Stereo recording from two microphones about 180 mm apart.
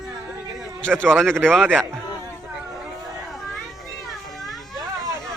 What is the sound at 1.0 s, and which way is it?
Speech, 5° right (ahead or behind).